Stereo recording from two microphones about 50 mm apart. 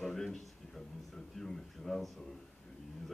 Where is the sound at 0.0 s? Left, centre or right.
Centre.